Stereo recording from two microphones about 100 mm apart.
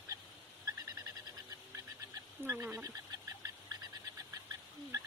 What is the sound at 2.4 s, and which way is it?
Speech, 25° right (ahead or behind).